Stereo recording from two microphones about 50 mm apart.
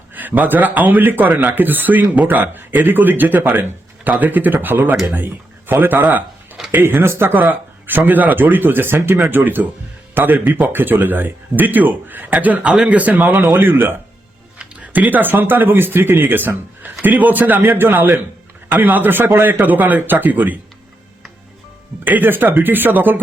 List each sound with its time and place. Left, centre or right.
0.1 s speech: right
6.8 s speech: right
7.9 s a man's voice: right
13.6 s speech: right
14.9 s speech: right
19.2 s speech: right
19.5 s speech: right
22.0 s speech: right